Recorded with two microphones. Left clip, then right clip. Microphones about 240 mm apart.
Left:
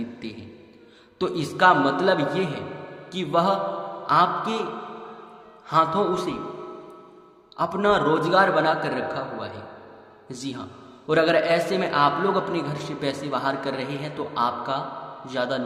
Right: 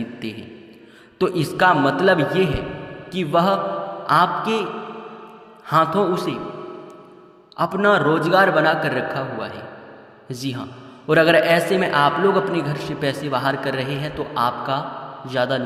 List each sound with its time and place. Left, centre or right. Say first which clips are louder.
0.2 s a man's voice: right 6 dB; right
5.6 s a man's voice: right 3 dB; right
7.5 s a man's voice: right 4 dB; centre